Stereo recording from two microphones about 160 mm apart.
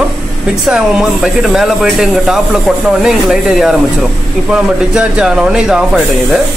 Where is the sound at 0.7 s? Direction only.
5° right (ahead or behind).